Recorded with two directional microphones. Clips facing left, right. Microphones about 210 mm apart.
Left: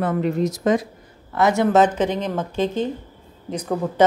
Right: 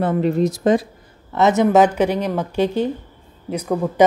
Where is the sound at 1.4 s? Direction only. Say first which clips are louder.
Right 2 dB; 20° right (ahead or behind).